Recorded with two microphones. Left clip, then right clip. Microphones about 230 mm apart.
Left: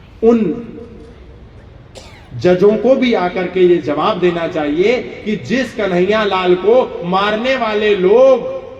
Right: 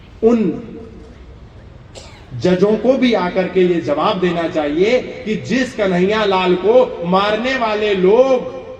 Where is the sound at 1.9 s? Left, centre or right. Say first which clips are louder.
Left 1 dB; left.